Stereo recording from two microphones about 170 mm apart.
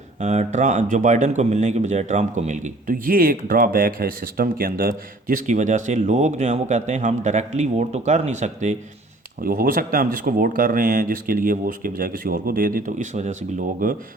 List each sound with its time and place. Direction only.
0.2 s speech: 40° right (ahead or behind)
9.4 s speech: 60° right (ahead or behind)
13.8 s speech: 55° right (ahead or behind)